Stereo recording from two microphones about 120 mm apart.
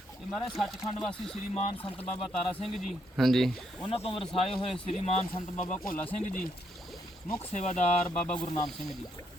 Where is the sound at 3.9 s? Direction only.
55° left (ahead or behind).